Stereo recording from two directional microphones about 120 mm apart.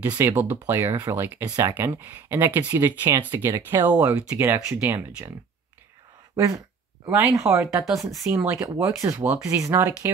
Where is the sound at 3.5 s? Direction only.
30° right (ahead or behind).